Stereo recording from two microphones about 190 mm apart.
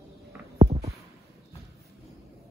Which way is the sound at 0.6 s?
35° right (ahead or behind).